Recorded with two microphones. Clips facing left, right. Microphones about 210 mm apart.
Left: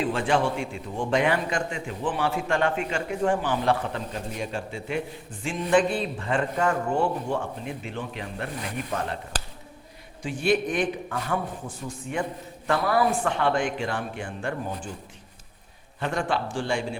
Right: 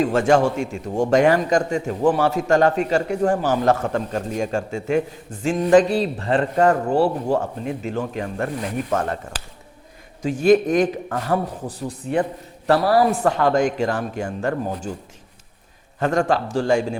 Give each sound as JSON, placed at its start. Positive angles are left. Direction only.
{"t": 0.0, "sound": "a man's voice", "side_deg": -45}
{"t": 10.2, "sound": "speech", "side_deg": -40}
{"t": 16.0, "sound": "speech", "side_deg": -45}